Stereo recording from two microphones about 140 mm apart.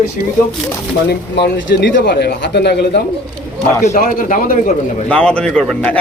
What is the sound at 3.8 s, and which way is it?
Speech, 65° left (ahead or behind).